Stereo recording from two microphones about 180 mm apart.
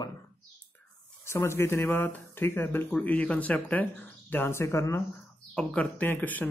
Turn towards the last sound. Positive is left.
turn(degrees=10)  # may be behind; listen again after turning